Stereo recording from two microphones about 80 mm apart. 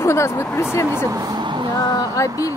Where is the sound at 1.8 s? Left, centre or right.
Left.